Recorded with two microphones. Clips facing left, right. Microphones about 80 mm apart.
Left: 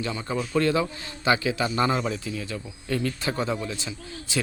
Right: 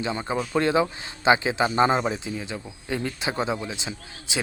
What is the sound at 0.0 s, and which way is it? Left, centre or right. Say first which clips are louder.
A man's voice: right 2 dB; right.